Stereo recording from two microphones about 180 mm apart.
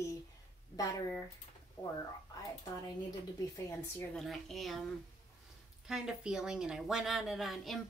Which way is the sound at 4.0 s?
Centre (ahead or behind).